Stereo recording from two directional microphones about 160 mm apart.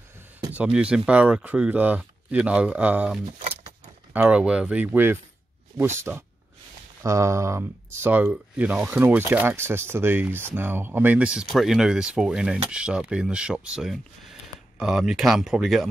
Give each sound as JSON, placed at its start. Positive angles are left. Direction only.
{"t": 0.7, "sound": "speech", "side_deg": -5}